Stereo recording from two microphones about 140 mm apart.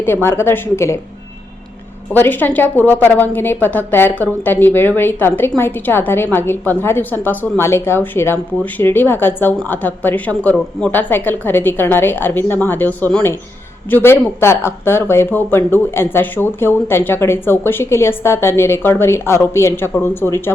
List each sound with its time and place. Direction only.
0.0 s speech: 15° left (ahead or behind)
2.1 s speech: 15° left (ahead or behind)